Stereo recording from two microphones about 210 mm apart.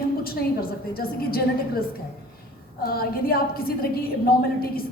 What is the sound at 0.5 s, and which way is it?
A woman's voice, 45° left (ahead or behind).